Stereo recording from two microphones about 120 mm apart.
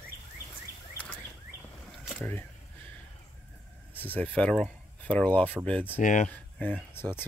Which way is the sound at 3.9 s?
15° left (ahead or behind).